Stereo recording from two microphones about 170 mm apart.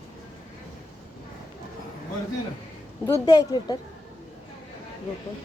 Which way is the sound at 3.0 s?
20° left (ahead or behind).